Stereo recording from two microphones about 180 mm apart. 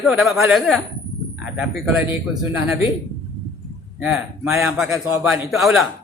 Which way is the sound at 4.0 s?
5° right (ahead or behind).